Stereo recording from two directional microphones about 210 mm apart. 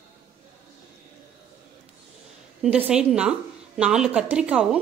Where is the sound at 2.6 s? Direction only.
5° right (ahead or behind).